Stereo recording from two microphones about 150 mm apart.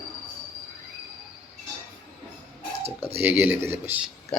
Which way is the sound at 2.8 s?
40° right (ahead or behind).